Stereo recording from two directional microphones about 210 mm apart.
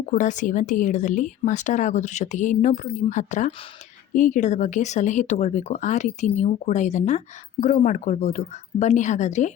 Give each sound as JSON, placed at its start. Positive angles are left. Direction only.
{"t": 0.1, "sound": "a woman's voice", "side_deg": 35}